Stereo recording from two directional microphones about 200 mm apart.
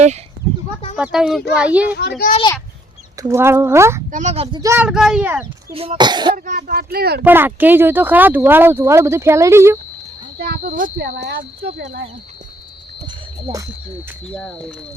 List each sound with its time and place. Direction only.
0.9 s speech: 5° right (ahead or behind)
2.0 s a child's voice: 55° left (ahead or behind)
3.2 s speech: 15° right (ahead or behind)
4.1 s a child's voice: 35° right (ahead or behind)
4.6 s speech: 10° right (ahead or behind)
5.7 s speech: 30° right (ahead or behind)
6.3 s a child's voice: 40° right (ahead or behind)
7.3 s speech: 10° right (ahead or behind)
10.3 s speech: 50° right (ahead or behind)
13.1 s a sound: 20° right (ahead or behind)
14.3 s speech: 5° left (ahead or behind)